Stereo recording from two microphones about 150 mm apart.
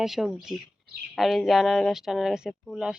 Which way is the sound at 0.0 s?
Centre (ahead or behind).